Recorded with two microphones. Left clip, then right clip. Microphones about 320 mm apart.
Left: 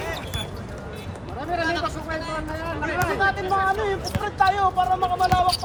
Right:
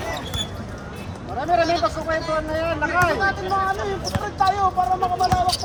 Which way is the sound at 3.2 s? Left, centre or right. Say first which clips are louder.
Even; left.